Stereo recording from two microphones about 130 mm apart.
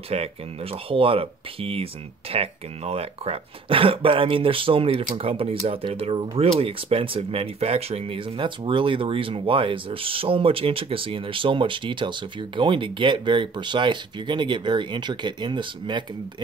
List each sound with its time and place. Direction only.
0.1 s speech: 50° right (ahead or behind)